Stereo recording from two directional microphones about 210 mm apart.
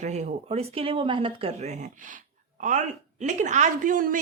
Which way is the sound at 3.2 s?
35° right (ahead or behind).